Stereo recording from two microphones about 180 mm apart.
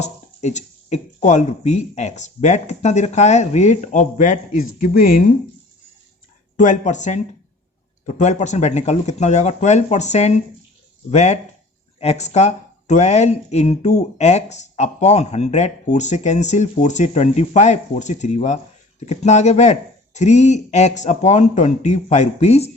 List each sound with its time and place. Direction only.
0.0 s speech: 40° left (ahead or behind)
6.6 s speech: 40° left (ahead or behind)